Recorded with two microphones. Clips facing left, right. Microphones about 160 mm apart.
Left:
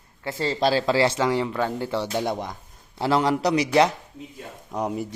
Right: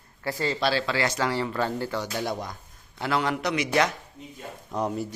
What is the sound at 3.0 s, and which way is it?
Speech, 35° left (ahead or behind).